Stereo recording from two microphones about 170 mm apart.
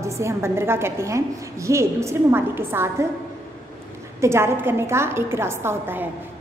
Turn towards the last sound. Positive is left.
turn(degrees=-15)  # may be behind; listen again after turning